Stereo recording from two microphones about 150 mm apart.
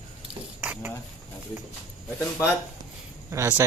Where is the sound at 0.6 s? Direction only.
10° right (ahead or behind).